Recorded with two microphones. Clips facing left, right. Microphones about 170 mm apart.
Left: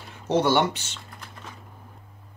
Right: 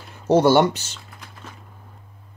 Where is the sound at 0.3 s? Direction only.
40° right (ahead or behind).